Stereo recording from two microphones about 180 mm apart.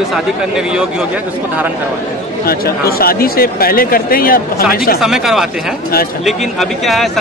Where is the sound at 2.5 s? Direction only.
55° left (ahead or behind).